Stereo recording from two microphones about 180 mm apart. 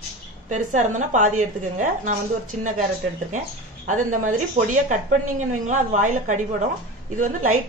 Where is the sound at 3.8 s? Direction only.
45° right (ahead or behind).